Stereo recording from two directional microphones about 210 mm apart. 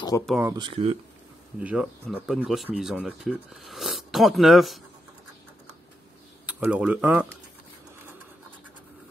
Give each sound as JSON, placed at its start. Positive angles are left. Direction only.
{"t": 0.4, "sound": "speech", "side_deg": -15}
{"t": 1.6, "sound": "speech", "side_deg": -5}
{"t": 6.4, "sound": "speech", "side_deg": -5}